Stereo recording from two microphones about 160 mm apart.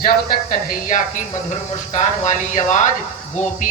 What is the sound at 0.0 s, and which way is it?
Speech, 60° left (ahead or behind).